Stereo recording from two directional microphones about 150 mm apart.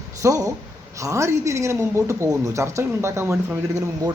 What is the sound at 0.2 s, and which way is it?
A woman's voice, 20° right (ahead or behind).